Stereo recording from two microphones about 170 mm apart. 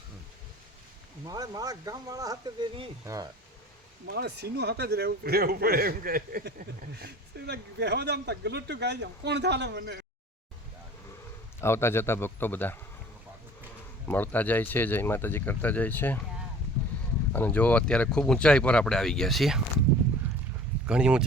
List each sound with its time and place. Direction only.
1.2 s speech: 20° right (ahead or behind)
4.1 s speech: 70° right (ahead or behind)
6.9 s speech: 75° right (ahead or behind)
11.6 s speech: 15° left (ahead or behind)
14.1 s speech: 10° left (ahead or behind)
17.3 s speech: 10° left (ahead or behind)
20.2 s clip-clop: 10° right (ahead or behind)
20.8 s speech: 5° right (ahead or behind)